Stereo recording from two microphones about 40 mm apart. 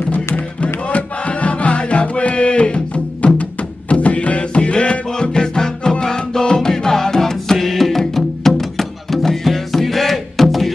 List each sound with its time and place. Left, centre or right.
0.6 s music: left
3.9 s music: left; by 10.7 s centre